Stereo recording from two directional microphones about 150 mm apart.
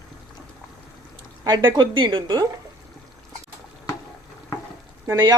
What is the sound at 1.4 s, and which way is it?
A woman's voice, 30° right (ahead or behind).